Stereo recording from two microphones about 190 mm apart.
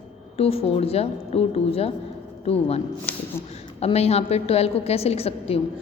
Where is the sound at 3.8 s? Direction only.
35° left (ahead or behind).